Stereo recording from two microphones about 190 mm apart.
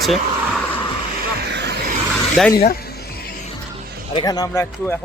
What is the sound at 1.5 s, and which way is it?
Vehicle, 60° right (ahead or behind).